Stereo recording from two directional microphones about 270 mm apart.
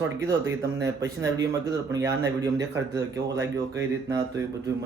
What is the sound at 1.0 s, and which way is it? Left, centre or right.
Speech, centre.